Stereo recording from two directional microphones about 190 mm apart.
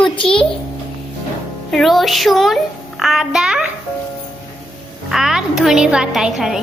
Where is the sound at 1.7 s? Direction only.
Centre (ahead or behind).